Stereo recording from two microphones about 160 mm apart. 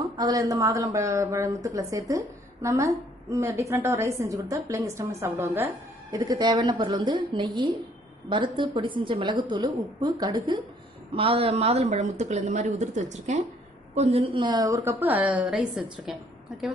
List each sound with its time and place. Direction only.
0.2 s a woman's voice: 20° right (ahead or behind)
6.1 s a woman's voice: 25° right (ahead or behind)
11.1 s a woman's voice: 35° right (ahead or behind); by 16.2 s 5° right (ahead or behind)